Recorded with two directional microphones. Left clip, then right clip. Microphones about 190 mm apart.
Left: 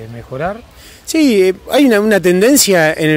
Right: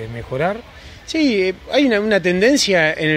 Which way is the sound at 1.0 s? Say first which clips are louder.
Left 6 dB; 60° left (ahead or behind).